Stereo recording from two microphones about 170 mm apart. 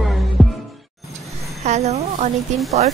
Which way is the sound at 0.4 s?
Centre (ahead or behind).